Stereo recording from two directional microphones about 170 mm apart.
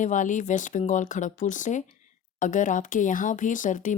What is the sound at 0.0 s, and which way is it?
Speech, 50° left (ahead or behind).